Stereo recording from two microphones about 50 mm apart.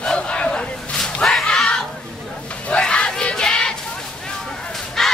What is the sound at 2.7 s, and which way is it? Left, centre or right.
Battle cry, centre.